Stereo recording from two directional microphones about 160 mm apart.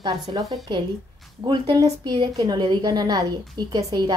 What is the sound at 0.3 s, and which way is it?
A woman's voice, 25° right (ahead or behind).